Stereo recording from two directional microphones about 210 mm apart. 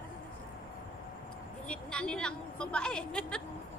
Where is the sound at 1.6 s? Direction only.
5° left (ahead or behind).